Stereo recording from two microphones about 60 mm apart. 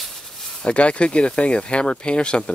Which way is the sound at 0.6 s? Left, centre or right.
Centre.